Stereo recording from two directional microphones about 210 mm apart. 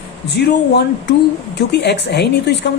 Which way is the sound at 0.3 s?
55° left (ahead or behind).